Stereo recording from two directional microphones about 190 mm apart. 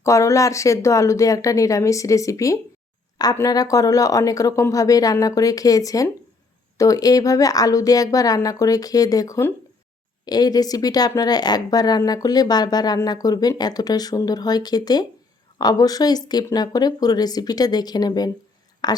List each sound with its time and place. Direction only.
0.0 s a woman's voice: 15° left (ahead or behind)